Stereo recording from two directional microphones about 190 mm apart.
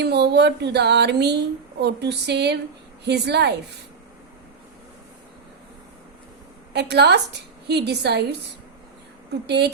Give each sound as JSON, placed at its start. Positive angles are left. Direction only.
{"t": 0.0, "sound": "a woman's voice", "side_deg": -60}
{"t": 6.7, "sound": "a woman's voice", "side_deg": -60}
{"t": 9.5, "sound": "a woman's voice", "side_deg": -60}